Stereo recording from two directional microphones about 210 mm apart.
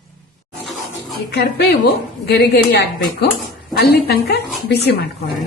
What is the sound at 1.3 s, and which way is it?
A woman's voice, 50° left (ahead or behind).